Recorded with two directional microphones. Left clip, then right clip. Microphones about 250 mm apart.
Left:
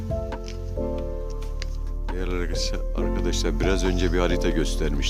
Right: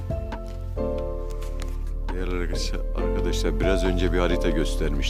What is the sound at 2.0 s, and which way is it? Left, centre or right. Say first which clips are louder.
Speech: even; centre.